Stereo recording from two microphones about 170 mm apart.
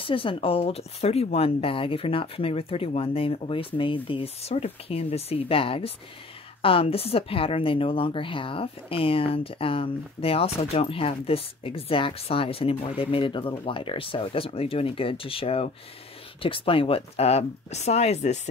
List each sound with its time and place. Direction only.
0.0 s a woman's voice: 30° left (ahead or behind)